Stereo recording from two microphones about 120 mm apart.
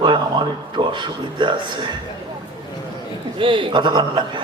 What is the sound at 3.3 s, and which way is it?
A man's voice, 45° right (ahead or behind).